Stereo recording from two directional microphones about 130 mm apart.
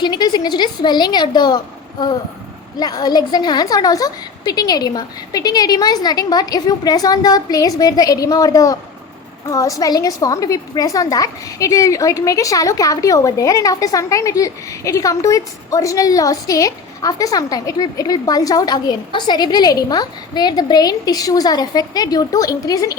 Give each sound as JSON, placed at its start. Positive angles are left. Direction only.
{"t": 0.0, "sound": "a woman's voice", "side_deg": 30}